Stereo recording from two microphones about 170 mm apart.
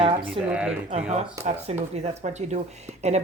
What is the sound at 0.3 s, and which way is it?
Speech, 5° right (ahead or behind).